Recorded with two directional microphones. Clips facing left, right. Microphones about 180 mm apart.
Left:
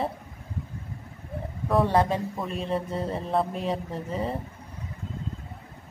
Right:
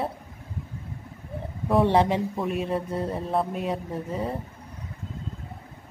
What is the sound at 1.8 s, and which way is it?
Speech, 20° right (ahead or behind).